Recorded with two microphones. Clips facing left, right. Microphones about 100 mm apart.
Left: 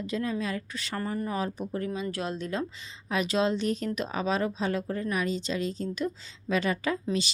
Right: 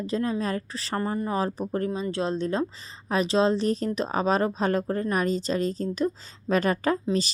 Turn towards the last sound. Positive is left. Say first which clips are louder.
# right 4 dB
turn(degrees=-40)  # may be behind; listen again after turning